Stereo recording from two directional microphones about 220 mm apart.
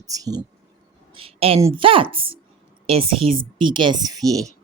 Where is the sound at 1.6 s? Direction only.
15° right (ahead or behind).